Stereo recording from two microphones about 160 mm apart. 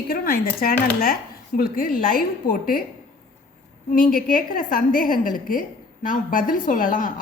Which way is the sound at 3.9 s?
65° left (ahead or behind).